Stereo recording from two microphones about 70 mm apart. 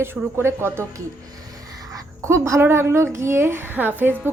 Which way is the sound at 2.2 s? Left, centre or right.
Right.